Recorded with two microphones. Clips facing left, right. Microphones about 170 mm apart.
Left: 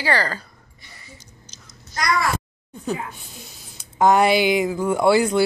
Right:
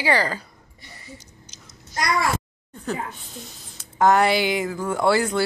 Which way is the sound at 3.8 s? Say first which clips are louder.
Left 1 dB; 15° left (ahead or behind).